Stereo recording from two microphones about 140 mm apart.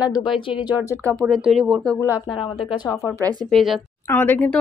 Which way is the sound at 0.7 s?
15° right (ahead or behind).